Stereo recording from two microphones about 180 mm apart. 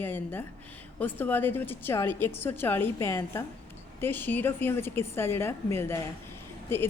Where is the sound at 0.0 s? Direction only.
10° left (ahead or behind).